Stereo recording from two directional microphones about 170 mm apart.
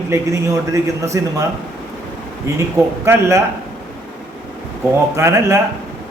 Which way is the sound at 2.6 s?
15° right (ahead or behind).